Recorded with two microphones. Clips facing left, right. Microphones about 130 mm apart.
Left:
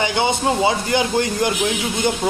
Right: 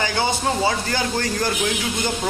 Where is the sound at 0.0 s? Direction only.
20° left (ahead or behind).